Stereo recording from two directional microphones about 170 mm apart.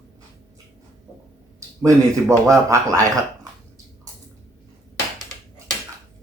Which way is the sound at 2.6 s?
20° right (ahead or behind).